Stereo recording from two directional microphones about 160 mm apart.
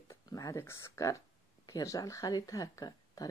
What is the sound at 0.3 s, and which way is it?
A woman's voice, 20° left (ahead or behind).